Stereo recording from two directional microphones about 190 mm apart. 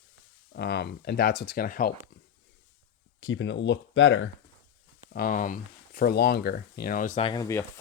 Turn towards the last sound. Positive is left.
turn(degrees=20)  # may be behind; listen again after turning